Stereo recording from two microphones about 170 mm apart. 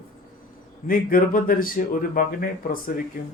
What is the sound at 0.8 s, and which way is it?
Speech, 55° left (ahead or behind).